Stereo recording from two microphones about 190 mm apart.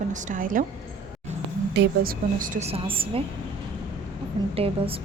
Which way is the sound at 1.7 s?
65° right (ahead or behind).